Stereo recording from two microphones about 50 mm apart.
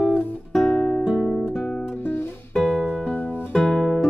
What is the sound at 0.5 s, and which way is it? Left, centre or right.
Guitar, centre.